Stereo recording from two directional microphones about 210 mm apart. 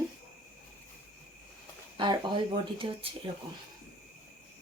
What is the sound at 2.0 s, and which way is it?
Speech, 20° right (ahead or behind).